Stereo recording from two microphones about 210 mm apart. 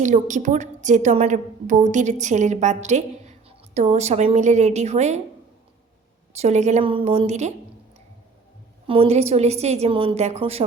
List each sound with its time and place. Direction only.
0.0 s a woman's voice: 35° right (ahead or behind)
6.3 s a woman's voice: 30° right (ahead or behind)
8.9 s a woman's voice: 30° right (ahead or behind)